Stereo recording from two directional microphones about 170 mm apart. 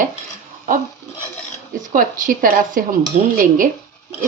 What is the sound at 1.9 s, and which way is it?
A woman's voice, 50° right (ahead or behind).